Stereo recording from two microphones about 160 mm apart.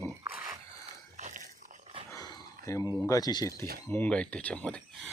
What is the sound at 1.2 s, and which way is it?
Dog, 50° right (ahead or behind).